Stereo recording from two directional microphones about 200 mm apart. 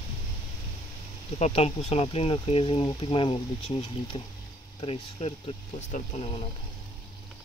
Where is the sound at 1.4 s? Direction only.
30° left (ahead or behind).